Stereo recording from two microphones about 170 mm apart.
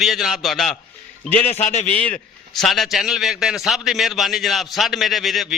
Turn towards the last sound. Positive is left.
turn(degrees=0)  # may be behind; listen again after turning